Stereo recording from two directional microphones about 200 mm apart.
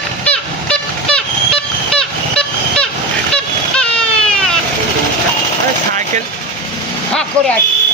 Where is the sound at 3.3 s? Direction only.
5° left (ahead or behind).